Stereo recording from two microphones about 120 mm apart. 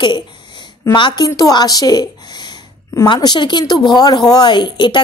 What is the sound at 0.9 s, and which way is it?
Speech, 40° left (ahead or behind).